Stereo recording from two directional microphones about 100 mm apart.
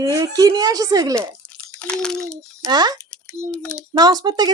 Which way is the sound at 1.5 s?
10° left (ahead or behind).